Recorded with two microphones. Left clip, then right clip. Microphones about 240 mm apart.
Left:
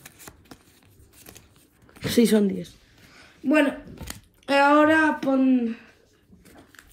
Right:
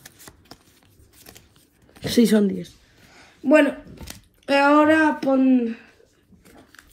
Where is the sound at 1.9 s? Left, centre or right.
Centre.